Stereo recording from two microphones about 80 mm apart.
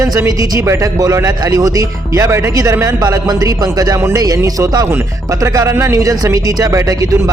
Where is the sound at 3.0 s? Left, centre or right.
Right.